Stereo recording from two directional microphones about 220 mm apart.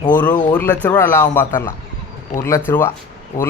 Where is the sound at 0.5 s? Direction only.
5° left (ahead or behind).